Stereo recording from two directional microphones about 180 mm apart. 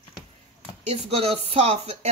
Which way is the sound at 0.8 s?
35° right (ahead or behind).